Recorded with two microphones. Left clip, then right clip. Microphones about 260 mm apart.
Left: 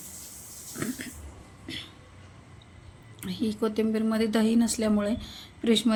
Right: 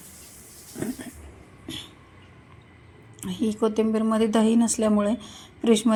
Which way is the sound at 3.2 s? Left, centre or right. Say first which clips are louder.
Right 4 dB; centre.